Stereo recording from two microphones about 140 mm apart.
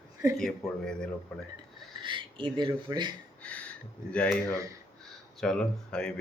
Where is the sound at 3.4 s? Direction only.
10° left (ahead or behind).